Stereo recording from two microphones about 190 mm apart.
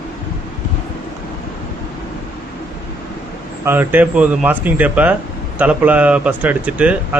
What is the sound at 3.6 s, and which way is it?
Speech, 10° right (ahead or behind).